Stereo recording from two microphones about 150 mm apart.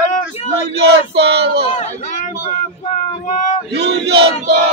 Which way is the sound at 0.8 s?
90° right.